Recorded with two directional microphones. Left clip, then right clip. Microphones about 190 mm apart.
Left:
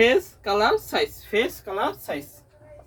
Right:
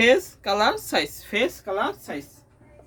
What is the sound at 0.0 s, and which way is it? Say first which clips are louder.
Speech: right 1 dB; 50° right (ahead or behind).